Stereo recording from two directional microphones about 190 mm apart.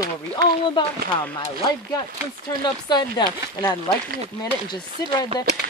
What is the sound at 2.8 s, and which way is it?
Speech, 20° left (ahead or behind).